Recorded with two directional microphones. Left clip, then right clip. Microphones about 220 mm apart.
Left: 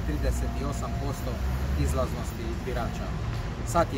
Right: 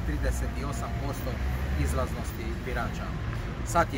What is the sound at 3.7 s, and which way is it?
Speech, centre (ahead or behind).